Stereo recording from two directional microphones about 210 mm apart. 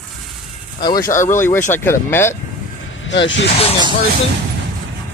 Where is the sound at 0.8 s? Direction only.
20° left (ahead or behind).